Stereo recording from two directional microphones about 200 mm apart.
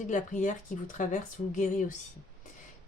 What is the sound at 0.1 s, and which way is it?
A woman's voice, 40° left (ahead or behind).